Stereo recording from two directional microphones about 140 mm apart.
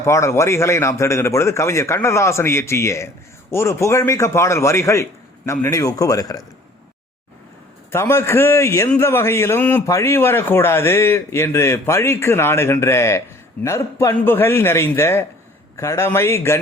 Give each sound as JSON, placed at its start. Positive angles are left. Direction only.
{"t": 0.0, "sound": "speech", "side_deg": 20}
{"t": 7.9, "sound": "a man's voice", "side_deg": 20}